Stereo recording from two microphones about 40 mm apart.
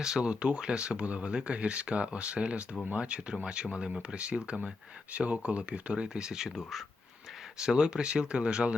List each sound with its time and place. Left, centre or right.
0.0 s speech: centre
0.3 s speech: right
5.1 s speech: right; by 6.5 s centre
6.6 s speech: centre
7.6 s speech: centre